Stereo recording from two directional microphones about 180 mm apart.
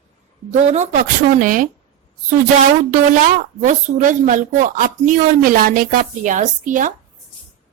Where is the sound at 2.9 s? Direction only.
45° right (ahead or behind).